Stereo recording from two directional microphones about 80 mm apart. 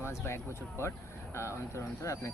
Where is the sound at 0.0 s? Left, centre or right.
Left.